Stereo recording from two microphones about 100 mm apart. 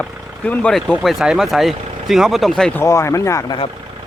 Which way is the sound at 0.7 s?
5° left (ahead or behind).